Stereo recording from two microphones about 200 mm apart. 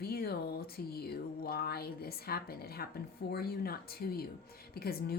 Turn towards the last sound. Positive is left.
turn(degrees=50)  # may be behind; listen again after turning